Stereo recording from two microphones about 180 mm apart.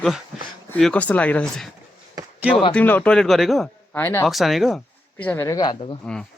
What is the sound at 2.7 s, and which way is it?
Speech, 10° left (ahead or behind).